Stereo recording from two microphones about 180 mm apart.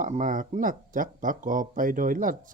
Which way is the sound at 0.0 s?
45° right (ahead or behind).